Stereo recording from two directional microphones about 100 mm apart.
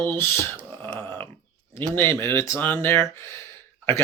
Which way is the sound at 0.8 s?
20° left (ahead or behind).